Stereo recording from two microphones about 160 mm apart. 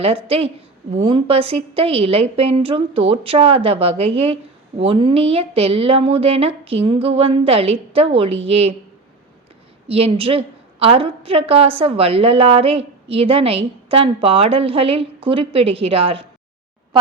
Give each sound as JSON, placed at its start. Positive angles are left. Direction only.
{"t": 0.0, "sound": "a woman's voice", "side_deg": -40}
{"t": 9.9, "sound": "a woman's voice", "side_deg": -35}